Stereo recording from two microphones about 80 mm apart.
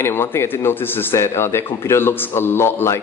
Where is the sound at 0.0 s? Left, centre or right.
Left.